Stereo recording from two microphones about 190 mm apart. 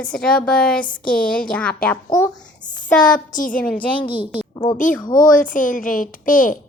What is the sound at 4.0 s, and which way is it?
Speech, 25° left (ahead or behind).